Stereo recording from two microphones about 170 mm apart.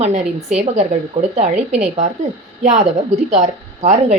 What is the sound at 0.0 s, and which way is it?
A woman's voice, 40° right (ahead or behind).